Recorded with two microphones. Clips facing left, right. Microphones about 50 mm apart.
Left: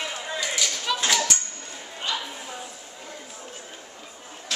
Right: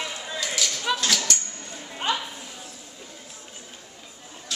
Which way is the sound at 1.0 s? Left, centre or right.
Centre.